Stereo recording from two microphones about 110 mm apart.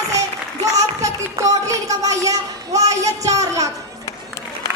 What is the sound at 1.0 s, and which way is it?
A woman's voice, 30° right (ahead or behind).